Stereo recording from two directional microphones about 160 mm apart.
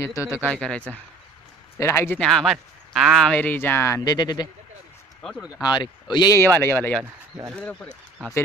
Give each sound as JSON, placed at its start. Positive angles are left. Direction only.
{"t": 0.4, "sound": "speech", "side_deg": 5}
{"t": 1.8, "sound": "speech", "side_deg": 15}
{"t": 2.1, "sound": "speech", "side_deg": 0}
{"t": 5.2, "sound": "speech", "side_deg": 5}
{"t": 5.6, "sound": "speech", "side_deg": 25}